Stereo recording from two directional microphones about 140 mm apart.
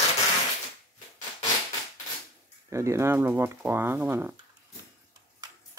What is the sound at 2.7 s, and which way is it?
Speech, 20° right (ahead or behind).